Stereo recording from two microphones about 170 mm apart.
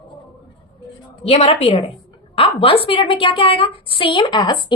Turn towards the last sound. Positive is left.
turn(degrees=25)  # may be behind; listen again after turning